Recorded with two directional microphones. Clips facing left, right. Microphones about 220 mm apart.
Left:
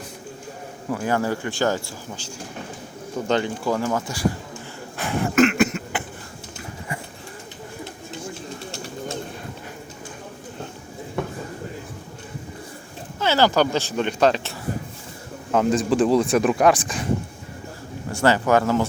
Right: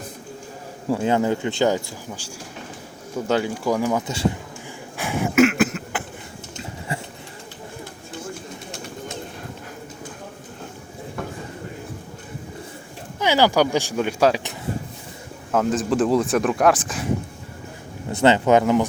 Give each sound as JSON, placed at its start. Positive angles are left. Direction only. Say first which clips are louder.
{"t": 0.9, "sound": "speech", "louder": "right 3 dB", "side_deg": -25}
{"t": 4.9, "sound": "a sound", "louder": "right 1 dB", "side_deg": -10}
{"t": 6.6, "sound": "a sound", "louder": "right 2 dB", "side_deg": -25}
{"t": 13.1, "sound": "speech", "louder": "right 1 dB", "side_deg": -15}
{"t": 15.5, "sound": "speech", "louder": "left 1 dB", "side_deg": 0}
{"t": 18.1, "sound": "speech", "louder": "right 3 dB", "side_deg": -20}